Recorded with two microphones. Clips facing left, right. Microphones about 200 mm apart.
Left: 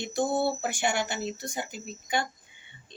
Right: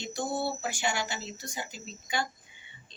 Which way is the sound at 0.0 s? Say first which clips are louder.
Left 5 dB; 55° left (ahead or behind).